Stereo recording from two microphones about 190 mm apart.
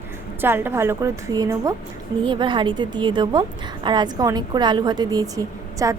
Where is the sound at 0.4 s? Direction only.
10° right (ahead or behind).